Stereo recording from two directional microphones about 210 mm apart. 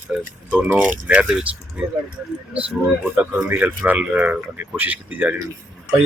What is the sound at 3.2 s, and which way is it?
Speech, 10° right (ahead or behind).